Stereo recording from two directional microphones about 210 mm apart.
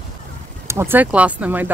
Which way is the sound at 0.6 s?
10° right (ahead or behind).